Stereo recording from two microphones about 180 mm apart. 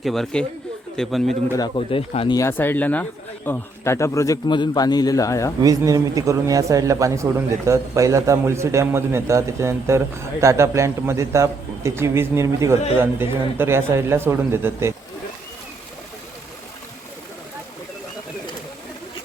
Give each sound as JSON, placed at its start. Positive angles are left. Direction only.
{"t": 0.0, "sound": "a man's voice", "side_deg": 0}
{"t": 1.5, "sound": "speech", "side_deg": 25}
{"t": 2.3, "sound": "speech", "side_deg": 15}
{"t": 5.6, "sound": "speech", "side_deg": -20}